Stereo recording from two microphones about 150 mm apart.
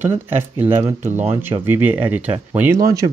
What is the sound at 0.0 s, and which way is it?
Speech, 15° right (ahead or behind).